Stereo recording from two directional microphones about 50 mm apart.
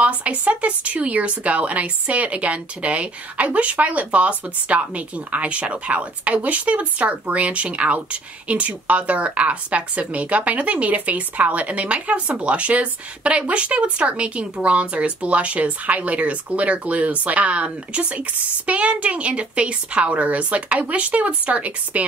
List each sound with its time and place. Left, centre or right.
0.0 s speech: right
18.7 s speech: right